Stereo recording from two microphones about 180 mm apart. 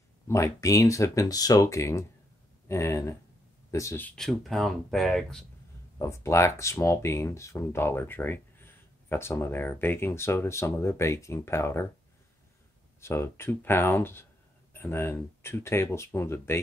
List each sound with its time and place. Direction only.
0.3 s speech: 15° left (ahead or behind)
5.9 s speech: 15° left (ahead or behind)
13.0 s speech: 15° left (ahead or behind)